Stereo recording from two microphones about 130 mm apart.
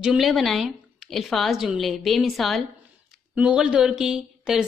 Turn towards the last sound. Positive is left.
turn(degrees=-5)  # may be behind; listen again after turning